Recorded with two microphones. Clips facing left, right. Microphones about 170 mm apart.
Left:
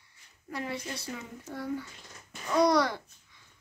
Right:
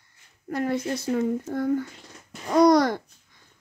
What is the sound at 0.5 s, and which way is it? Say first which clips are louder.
Speech: right 10 dB; 50° right (ahead or behind).